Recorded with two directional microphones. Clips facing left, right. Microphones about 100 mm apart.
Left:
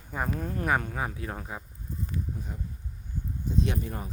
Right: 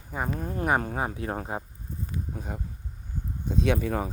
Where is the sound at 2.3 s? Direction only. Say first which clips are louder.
Right 3 dB; 65° right (ahead or behind); by 4.1 s 90° right.